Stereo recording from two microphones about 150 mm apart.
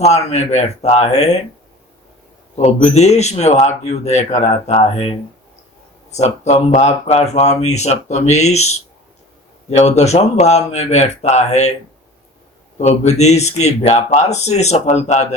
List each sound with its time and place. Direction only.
0.0 s speech: 45° left (ahead or behind)
2.6 s speech: 50° left (ahead or behind)
12.8 s speech: 45° left (ahead or behind)